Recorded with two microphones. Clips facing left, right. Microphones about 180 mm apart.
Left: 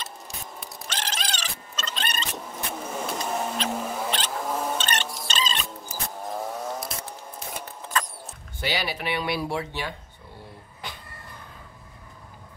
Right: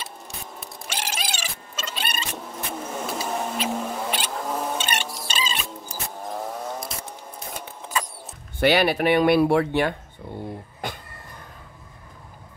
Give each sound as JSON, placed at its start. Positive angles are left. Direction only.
{"t": 0.6, "sound": "cat", "side_deg": -10}
{"t": 3.8, "sound": "music", "side_deg": 0}
{"t": 4.4, "sound": "a sound", "side_deg": 0}
{"t": 5.9, "sound": "vehicle", "side_deg": 0}
{"t": 7.1, "sound": "rodents", "side_deg": 0}
{"t": 8.5, "sound": "speech", "side_deg": -60}
{"t": 10.8, "sound": "a sound", "side_deg": -50}